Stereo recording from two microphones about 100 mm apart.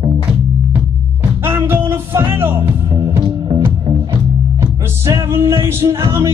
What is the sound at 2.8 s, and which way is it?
Music, 35° right (ahead or behind).